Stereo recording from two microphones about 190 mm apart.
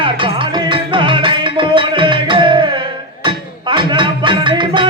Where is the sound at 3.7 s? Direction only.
25° right (ahead or behind).